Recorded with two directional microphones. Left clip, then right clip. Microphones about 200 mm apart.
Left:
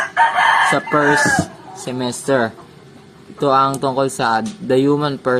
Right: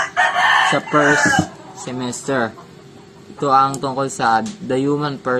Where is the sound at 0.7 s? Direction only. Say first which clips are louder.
Even; 30° left (ahead or behind).